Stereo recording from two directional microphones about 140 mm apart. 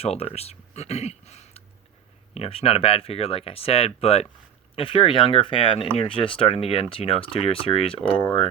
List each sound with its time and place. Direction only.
0.0 s speech: 45° left (ahead or behind)